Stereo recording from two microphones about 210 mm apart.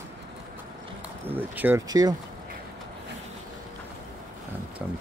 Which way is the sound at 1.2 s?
10° right (ahead or behind).